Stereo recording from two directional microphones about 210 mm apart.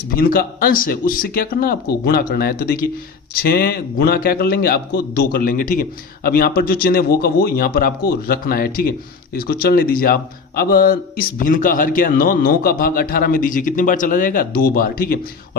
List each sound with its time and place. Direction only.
0.2 s a man's voice: 45° left (ahead or behind)